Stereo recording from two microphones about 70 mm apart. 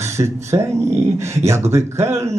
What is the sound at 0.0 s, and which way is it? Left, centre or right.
Speech, right.